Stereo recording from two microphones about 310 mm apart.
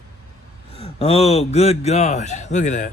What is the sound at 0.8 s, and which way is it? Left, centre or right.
Speech, centre.